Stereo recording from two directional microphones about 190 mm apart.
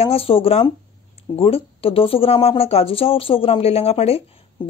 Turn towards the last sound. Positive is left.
turn(degrees=30)  # may be behind; listen again after turning